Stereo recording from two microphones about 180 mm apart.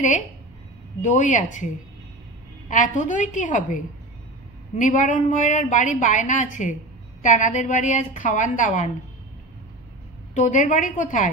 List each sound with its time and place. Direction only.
1.0 s a woman's voice: 40° left (ahead or behind)
2.7 s a woman's voice: 45° left (ahead or behind)
10.3 s a woman's voice: 40° left (ahead or behind)